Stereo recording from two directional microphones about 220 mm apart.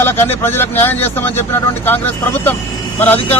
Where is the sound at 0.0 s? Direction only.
10° left (ahead or behind).